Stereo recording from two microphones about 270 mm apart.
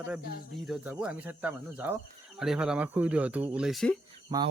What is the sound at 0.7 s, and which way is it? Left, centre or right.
Speech, centre.